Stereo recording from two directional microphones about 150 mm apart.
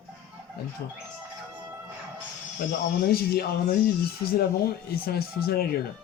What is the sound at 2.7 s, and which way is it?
Speech, 90° left.